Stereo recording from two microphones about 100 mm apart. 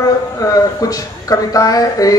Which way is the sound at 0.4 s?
35° left (ahead or behind).